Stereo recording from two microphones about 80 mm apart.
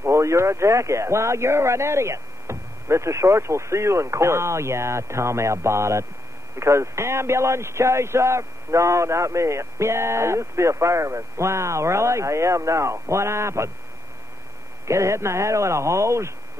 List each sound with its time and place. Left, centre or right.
0.0 s speech: right
14.9 s speech: right